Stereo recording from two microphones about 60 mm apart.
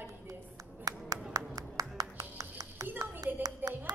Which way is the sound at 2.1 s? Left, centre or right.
Right.